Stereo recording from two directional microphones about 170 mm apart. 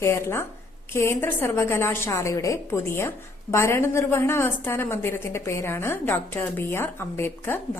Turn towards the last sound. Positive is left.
turn(degrees=10)  # may be behind; listen again after turning